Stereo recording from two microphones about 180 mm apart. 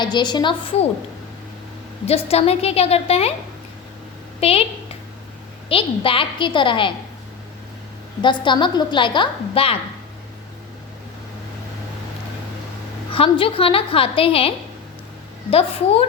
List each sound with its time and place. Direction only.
0.0 s a woman's voice: 25° left (ahead or behind)
2.0 s a woman's voice: 35° left (ahead or behind)
4.4 s a woman's voice: 35° left (ahead or behind)
5.6 s a woman's voice: 30° left (ahead or behind)
8.2 s a woman's voice: 25° left (ahead or behind)
13.1 s a woman's voice: 30° left (ahead or behind)